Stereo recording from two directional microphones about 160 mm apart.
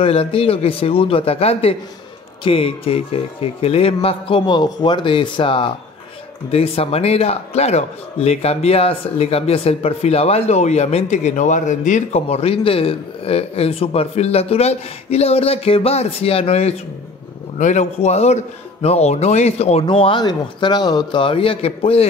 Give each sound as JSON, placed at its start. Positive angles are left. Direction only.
{"t": 0.0, "sound": "a man's voice", "side_deg": 35}